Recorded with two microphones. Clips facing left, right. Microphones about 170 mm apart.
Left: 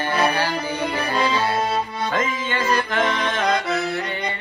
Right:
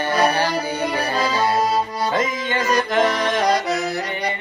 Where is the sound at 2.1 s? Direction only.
20° right (ahead or behind).